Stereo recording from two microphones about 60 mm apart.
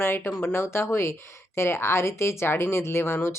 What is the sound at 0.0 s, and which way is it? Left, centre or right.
Speech, left.